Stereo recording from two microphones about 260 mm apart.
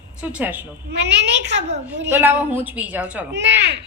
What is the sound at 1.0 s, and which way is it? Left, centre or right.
Speech, right.